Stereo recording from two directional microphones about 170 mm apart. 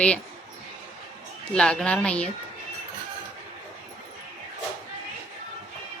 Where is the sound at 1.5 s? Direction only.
5° left (ahead or behind).